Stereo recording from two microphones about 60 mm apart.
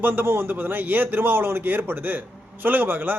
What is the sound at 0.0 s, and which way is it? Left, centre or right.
A man's voice, right.